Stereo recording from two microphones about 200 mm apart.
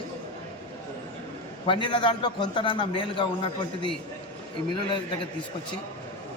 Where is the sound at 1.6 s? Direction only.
25° left (ahead or behind).